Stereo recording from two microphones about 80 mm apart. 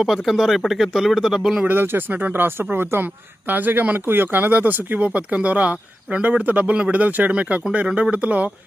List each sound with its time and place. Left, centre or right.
0.0 s speech: centre
1.6 s speech: right